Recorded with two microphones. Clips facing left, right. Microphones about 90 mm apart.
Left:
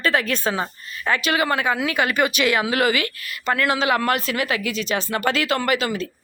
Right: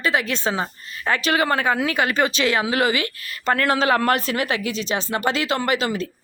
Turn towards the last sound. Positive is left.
turn(degrees=-30)  # may be behind; listen again after turning